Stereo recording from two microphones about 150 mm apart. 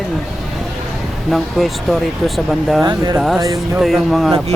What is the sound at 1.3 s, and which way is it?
Speech, centre (ahead or behind).